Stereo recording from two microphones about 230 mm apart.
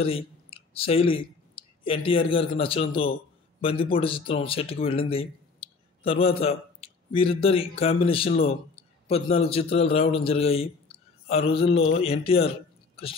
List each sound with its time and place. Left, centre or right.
0.0 s a man's voice: left